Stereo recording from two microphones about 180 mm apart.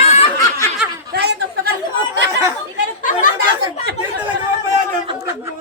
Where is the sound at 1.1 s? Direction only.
65° right (ahead or behind).